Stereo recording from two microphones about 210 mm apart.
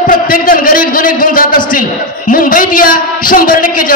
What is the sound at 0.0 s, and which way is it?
A man's voice, 40° left (ahead or behind).